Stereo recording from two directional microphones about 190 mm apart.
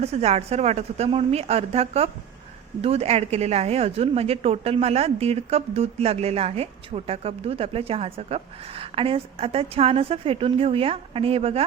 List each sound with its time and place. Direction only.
0.0 s speech: 35° right (ahead or behind)